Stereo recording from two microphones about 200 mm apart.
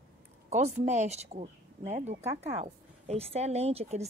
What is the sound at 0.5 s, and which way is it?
Speech, 35° right (ahead or behind).